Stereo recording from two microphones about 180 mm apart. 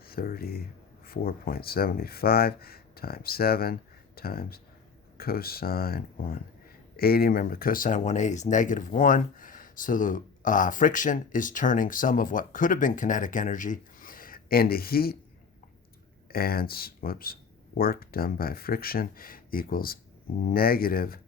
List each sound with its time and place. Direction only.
0.0 s speech: 55° left (ahead or behind)
16.3 s speech: 55° left (ahead or behind)